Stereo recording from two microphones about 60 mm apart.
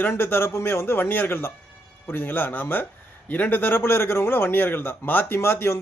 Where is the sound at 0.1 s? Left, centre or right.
Left.